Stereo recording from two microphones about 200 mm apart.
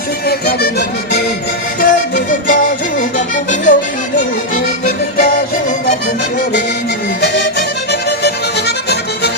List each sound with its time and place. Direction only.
0.3 s accordion: 50° left (ahead or behind)
1.8 s music: 45° left (ahead or behind)
7.9 s music: 55° left (ahead or behind)